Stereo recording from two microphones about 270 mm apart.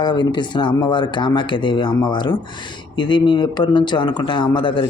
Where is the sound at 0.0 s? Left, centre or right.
Centre.